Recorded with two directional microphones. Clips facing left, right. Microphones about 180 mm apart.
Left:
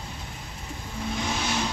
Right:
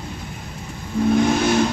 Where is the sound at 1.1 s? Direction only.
55° right (ahead or behind).